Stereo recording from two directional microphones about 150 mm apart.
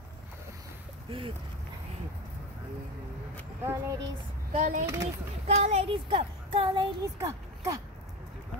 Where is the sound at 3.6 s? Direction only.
15° right (ahead or behind).